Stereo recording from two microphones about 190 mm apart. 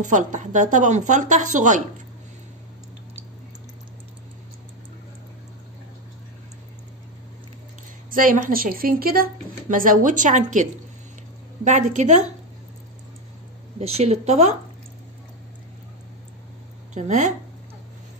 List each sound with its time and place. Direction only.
0.0 s a woman's voice: 40° right (ahead or behind)
8.1 s a woman's voice: 45° right (ahead or behind)
13.7 s a woman's voice: 35° right (ahead or behind)
16.9 s a woman's voice: 40° right (ahead or behind)